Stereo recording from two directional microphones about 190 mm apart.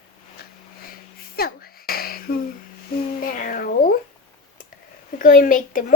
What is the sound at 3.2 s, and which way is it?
Speech, 50° left (ahead or behind).